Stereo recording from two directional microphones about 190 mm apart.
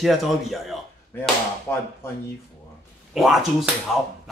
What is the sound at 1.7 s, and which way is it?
Speech, 10° left (ahead or behind).